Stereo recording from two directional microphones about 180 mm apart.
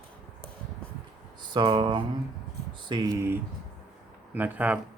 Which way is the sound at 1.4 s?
25° right (ahead or behind).